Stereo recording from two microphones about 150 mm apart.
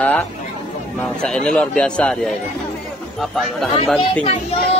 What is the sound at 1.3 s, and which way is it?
A man's voice, 5° left (ahead or behind).